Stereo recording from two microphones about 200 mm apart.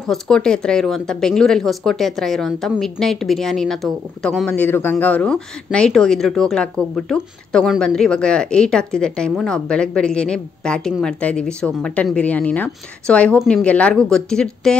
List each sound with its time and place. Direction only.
0.0 s a woman's voice: centre (ahead or behind)